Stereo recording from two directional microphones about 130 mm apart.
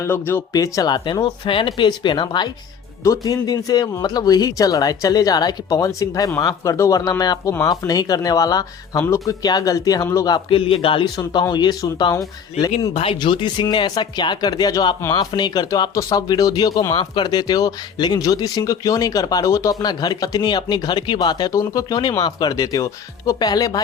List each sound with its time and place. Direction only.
0.0 s speech: 20° left (ahead or behind)
0.5 s speech: 30° left (ahead or behind)
3.0 s speech: 25° left (ahead or behind)
10.3 s speech: 45° left (ahead or behind)
11.2 s speech: 30° left (ahead or behind)
12.9 s speech: 45° left (ahead or behind)